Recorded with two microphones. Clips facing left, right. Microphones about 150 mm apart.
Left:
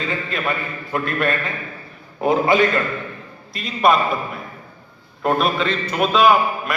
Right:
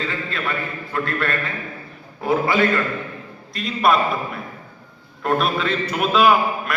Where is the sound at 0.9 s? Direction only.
15° left (ahead or behind).